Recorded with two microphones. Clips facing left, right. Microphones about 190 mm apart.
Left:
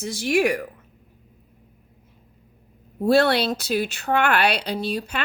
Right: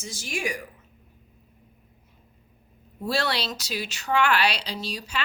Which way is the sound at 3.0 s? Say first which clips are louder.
Left 9 dB; 55° left (ahead or behind).